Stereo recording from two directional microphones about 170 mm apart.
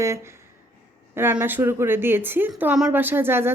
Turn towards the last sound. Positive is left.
turn(degrees=-15)  # may be behind; listen again after turning